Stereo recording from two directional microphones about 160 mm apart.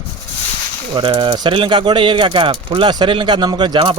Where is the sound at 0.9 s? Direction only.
30° right (ahead or behind).